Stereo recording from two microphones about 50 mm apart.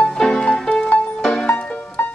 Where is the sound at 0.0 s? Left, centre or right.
Centre.